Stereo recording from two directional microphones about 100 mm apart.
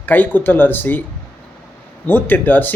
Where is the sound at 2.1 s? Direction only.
20° left (ahead or behind).